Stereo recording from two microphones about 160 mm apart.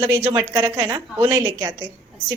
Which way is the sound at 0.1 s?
10° right (ahead or behind).